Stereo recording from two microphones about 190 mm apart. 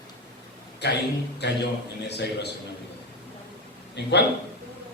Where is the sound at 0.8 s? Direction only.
60° left (ahead or behind).